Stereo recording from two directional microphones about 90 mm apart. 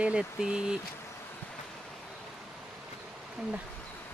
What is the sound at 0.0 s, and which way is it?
Speech, 10° right (ahead or behind).